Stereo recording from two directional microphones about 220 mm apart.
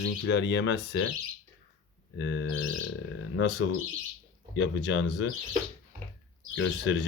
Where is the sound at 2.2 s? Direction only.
55° left (ahead or behind).